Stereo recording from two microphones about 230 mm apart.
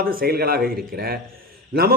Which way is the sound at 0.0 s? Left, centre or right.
Right.